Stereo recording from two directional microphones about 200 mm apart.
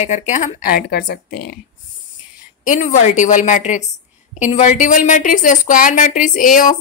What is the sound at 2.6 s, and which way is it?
A woman's voice, 40° left (ahead or behind).